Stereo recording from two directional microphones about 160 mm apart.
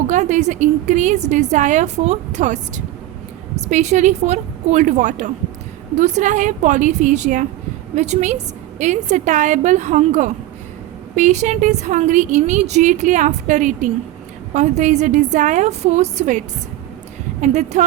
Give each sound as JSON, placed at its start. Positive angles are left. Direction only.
{"t": 0.1, "sound": "a woman's voice", "side_deg": -50}
{"t": 17.4, "sound": "a woman's voice", "side_deg": -45}